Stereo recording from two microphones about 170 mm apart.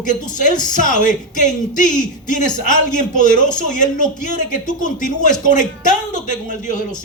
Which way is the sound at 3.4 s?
50° left (ahead or behind).